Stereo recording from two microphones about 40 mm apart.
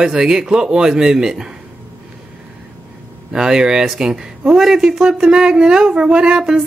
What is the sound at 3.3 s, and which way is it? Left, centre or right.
Speech, centre.